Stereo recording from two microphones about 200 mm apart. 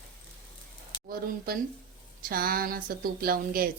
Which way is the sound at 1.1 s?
50° right (ahead or behind).